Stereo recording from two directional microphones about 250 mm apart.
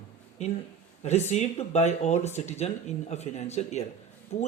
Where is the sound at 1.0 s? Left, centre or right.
Left.